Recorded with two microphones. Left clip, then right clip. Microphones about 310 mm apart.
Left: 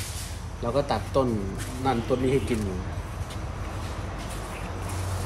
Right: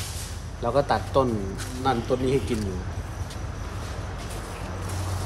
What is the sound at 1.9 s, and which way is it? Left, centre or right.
Speech, centre.